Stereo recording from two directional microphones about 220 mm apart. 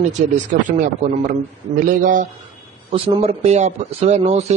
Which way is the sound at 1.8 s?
35° right (ahead or behind).